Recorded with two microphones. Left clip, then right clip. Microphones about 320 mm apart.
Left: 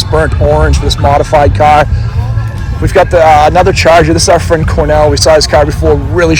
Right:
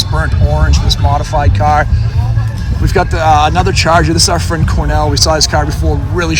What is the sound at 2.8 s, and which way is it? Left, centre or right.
Speech, centre.